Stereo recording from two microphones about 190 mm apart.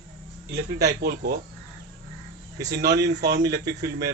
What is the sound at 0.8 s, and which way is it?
Speech, 60° right (ahead or behind).